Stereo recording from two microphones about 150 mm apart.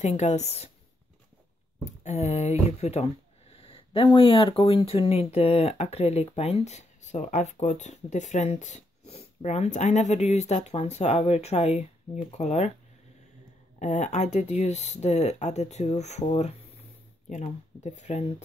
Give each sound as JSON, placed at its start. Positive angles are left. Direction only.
{"t": 0.0, "sound": "speech", "side_deg": 50}
{"t": 2.0, "sound": "speech", "side_deg": 45}
{"t": 13.7, "sound": "speech", "side_deg": 50}
{"t": 17.8, "sound": "speech", "side_deg": 50}